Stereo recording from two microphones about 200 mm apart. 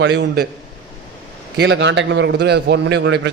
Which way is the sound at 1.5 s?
60° right (ahead or behind).